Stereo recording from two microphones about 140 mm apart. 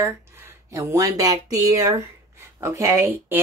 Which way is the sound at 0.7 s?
20° right (ahead or behind).